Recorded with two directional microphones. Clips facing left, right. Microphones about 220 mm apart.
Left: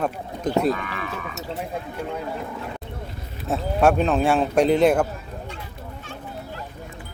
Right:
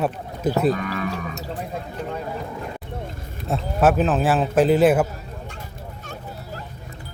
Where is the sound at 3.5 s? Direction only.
5° right (ahead or behind).